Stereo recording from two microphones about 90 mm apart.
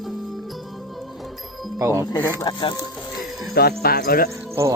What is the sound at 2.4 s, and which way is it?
Speech, 55° left (ahead or behind).